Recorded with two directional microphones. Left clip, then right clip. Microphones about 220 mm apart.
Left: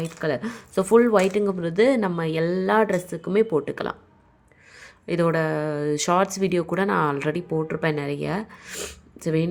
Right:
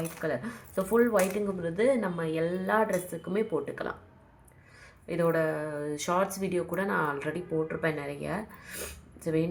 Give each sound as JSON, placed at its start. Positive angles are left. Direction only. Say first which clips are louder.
{"t": 0.0, "sound": "speech", "louder": "left 6 dB", "side_deg": 45}